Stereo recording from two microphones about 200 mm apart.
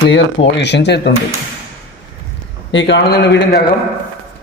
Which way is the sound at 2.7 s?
60° left (ahead or behind).